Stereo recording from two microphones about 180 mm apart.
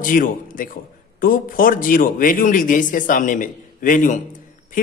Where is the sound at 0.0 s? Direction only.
50° left (ahead or behind).